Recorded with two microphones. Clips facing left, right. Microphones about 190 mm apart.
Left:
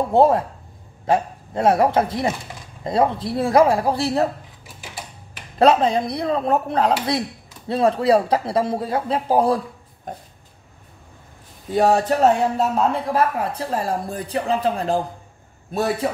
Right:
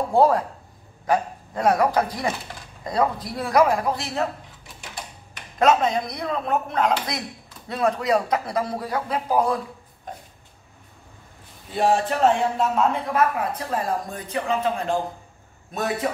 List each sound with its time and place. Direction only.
0.1 s speech: 25° left (ahead or behind)
5.6 s speech: 30° left (ahead or behind)
10.1 s oink: 50° left (ahead or behind)
11.7 s speech: 40° left (ahead or behind)